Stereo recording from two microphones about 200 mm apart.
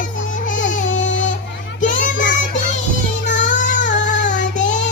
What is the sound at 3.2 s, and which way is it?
Child singing, 40° left (ahead or behind).